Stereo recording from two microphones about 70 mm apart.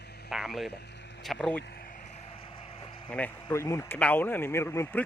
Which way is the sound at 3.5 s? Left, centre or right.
Left.